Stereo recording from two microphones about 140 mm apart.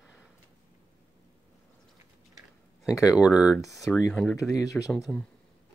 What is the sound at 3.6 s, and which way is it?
Speech, 25° left (ahead or behind).